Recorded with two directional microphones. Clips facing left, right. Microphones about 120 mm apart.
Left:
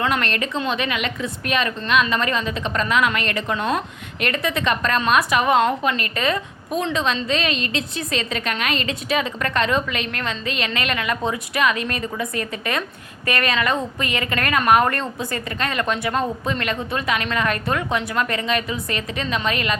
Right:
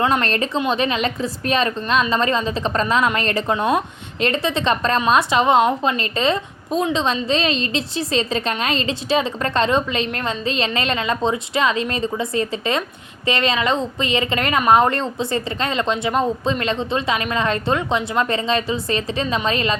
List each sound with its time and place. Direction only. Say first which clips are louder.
0.0 s a woman's voice: right 3 dB; 30° right (ahead or behind)